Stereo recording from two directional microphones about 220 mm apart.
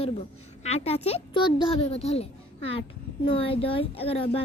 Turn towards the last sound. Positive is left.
turn(degrees=25)  # may be behind; listen again after turning